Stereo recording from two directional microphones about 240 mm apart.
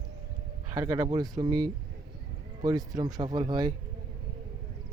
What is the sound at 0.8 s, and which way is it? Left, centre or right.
Speech, centre.